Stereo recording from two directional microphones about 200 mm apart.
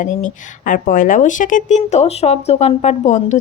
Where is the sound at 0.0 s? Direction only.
40° left (ahead or behind).